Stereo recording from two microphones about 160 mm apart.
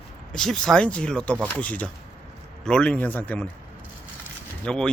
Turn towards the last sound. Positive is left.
turn(degrees=5)  # may be behind; listen again after turning